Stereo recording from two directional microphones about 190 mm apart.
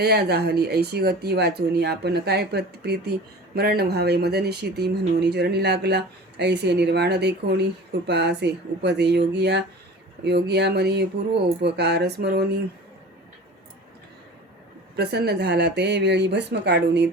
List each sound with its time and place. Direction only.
0.0 s speech: 60° right (ahead or behind)
14.9 s speech: 60° right (ahead or behind)